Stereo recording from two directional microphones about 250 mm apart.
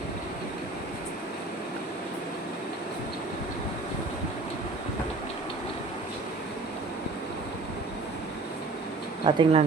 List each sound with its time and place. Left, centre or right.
9.2 s speech: right